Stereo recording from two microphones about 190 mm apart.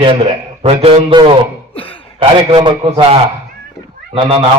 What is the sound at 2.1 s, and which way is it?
A man's voice, 25° right (ahead or behind).